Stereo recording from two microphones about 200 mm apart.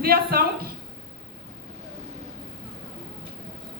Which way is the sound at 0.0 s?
50° right (ahead or behind).